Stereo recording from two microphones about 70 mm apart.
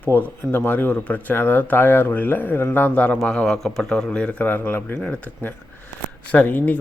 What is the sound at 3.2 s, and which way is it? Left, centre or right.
A man's voice, centre.